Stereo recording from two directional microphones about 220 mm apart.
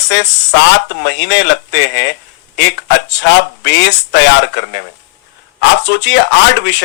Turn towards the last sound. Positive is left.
turn(degrees=50)  # may be behind; listen again after turning